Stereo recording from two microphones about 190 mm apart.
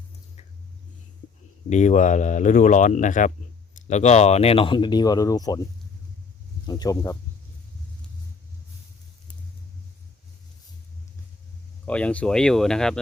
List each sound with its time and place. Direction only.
1.7 s speech: 40° left (ahead or behind); by 5.5 s 20° left (ahead or behind)
6.7 s speech: 20° left (ahead or behind)
11.9 s speech: 5° left (ahead or behind)